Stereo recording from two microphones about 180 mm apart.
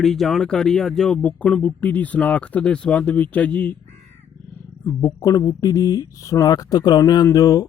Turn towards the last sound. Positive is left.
turn(degrees=20)  # may be behind; listen again after turning